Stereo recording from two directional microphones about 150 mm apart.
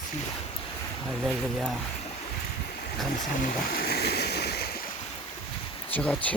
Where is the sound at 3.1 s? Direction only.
70° left (ahead or behind); by 4.7 s 90° left.